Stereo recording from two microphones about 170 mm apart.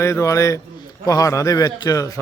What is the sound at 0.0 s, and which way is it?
A man's voice, 15° left (ahead or behind).